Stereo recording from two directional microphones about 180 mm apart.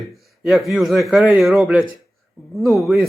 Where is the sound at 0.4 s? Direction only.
Centre (ahead or behind).